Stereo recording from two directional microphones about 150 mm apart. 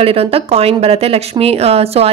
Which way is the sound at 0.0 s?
40° right (ahead or behind).